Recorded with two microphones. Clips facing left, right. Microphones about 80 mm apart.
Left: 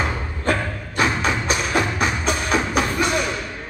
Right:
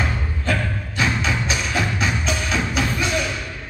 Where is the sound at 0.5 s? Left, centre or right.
Left.